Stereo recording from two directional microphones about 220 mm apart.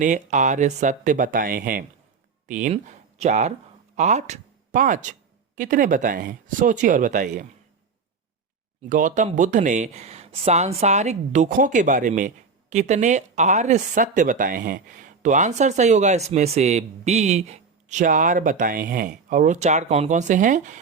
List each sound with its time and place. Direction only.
0.0 s speech: 35° right (ahead or behind)
8.9 s speech: 35° right (ahead or behind)